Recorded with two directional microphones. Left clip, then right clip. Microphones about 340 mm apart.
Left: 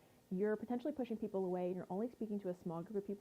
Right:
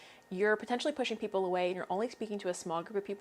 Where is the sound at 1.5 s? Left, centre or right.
Centre.